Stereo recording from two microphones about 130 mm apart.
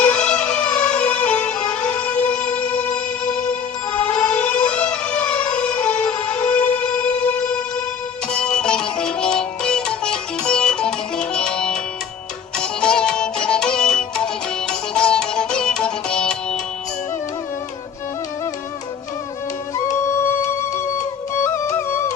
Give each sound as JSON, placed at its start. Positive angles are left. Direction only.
{"t": 0.0, "sound": "music", "side_deg": 5}
{"t": 21.0, "sound": "music", "side_deg": 20}